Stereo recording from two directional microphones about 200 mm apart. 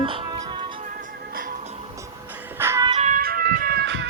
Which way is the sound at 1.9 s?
10° right (ahead or behind).